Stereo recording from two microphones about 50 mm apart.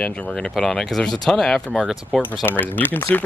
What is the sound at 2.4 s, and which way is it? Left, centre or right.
Speech, left.